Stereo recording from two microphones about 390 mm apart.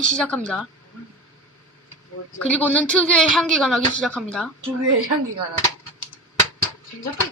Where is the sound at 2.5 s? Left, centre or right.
Centre.